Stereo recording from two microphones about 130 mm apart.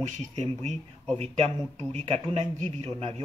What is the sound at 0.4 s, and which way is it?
A man's voice, 60° right (ahead or behind).